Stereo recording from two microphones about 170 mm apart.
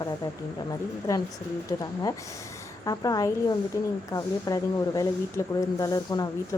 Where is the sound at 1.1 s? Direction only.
20° left (ahead or behind).